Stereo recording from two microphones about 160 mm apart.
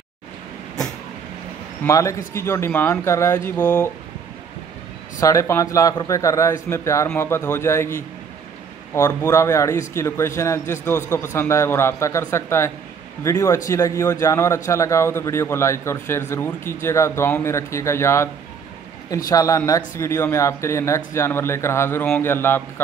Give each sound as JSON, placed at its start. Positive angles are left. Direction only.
{"t": 1.9, "sound": "speech", "side_deg": 20}
{"t": 5.2, "sound": "a man's voice", "side_deg": 20}